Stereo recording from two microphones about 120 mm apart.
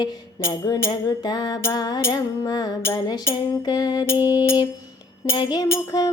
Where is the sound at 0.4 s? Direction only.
30° left (ahead or behind).